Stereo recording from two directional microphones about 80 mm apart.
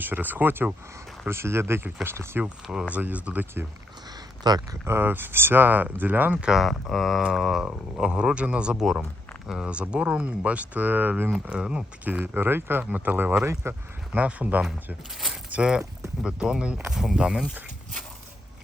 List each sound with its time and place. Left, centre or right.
0.0 s speech: right
2.4 s speech: centre
4.4 s speech: right
4.9 s speech: right
6.4 s speech: centre
7.6 s speech: centre; by 13.7 s right
14.1 s speech: centre
15.3 s a sound: centre
16.2 s speech: centre